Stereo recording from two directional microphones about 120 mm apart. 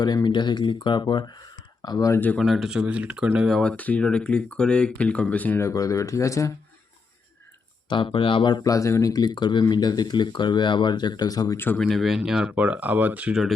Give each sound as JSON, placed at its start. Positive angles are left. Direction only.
{"t": 0.0, "sound": "speech", "side_deg": 35}
{"t": 2.4, "sound": "speech", "side_deg": 0}
{"t": 3.6, "sound": "speech", "side_deg": 10}
{"t": 7.9, "sound": "speech", "side_deg": 40}
{"t": 11.8, "sound": "speech", "side_deg": 0}